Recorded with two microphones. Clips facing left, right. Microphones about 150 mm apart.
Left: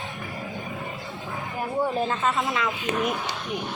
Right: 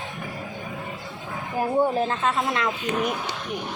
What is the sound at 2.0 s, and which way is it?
Speech, centre (ahead or behind).